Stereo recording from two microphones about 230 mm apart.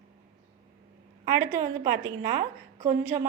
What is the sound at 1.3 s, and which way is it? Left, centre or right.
A woman's voice, centre.